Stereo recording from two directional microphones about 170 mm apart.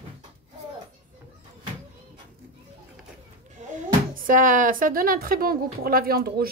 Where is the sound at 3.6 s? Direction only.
50° right (ahead or behind).